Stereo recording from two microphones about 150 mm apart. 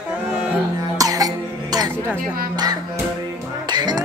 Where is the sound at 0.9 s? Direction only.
25° right (ahead or behind).